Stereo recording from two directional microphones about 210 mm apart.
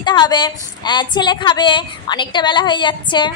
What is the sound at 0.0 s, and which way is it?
A woman's voice, 20° left (ahead or behind).